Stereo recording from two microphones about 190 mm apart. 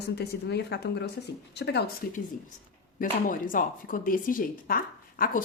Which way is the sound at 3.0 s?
45° left (ahead or behind).